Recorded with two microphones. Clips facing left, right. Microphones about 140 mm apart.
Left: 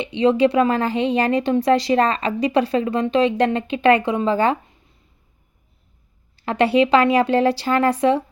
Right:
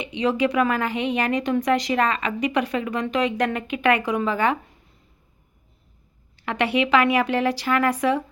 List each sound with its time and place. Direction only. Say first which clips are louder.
0.0 s a woman's voice: left 6 dB; 30° left (ahead or behind)
6.3 s a woman's voice: left 6 dB; 30° left (ahead or behind)